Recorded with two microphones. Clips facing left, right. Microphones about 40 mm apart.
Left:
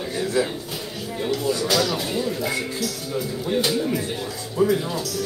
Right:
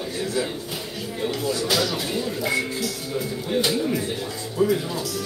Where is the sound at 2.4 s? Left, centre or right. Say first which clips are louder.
Right 1 dB; centre.